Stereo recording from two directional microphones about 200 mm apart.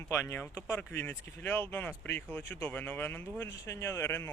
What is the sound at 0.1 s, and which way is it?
Speech, 15° left (ahead or behind).